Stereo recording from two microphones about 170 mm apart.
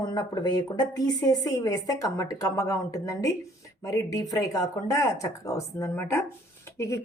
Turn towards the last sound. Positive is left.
turn(degrees=15)  # may be behind; listen again after turning